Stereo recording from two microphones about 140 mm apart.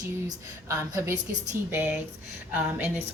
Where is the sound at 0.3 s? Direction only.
20° right (ahead or behind).